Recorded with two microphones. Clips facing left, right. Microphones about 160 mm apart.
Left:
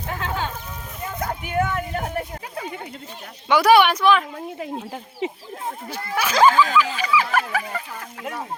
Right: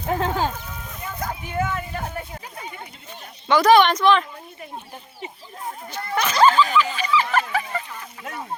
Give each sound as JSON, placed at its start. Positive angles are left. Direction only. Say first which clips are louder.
{"t": 0.1, "sound": "a sound", "louder": "right 5 dB", "side_deg": -35}
{"t": 1.5, "sound": "speech", "louder": "left 3 dB", "side_deg": 60}
{"t": 3.5, "sound": "speech", "louder": "even", "side_deg": 10}
{"t": 5.2, "sound": "speech", "louder": "left 10 dB", "side_deg": 90}
{"t": 5.9, "sound": "speech", "louder": "even", "side_deg": 5}
{"t": 6.7, "sound": "a sound", "louder": "left 1 dB", "side_deg": 10}